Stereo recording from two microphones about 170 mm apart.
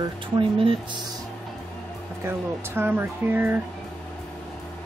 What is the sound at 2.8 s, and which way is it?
Speech, 10° right (ahead or behind).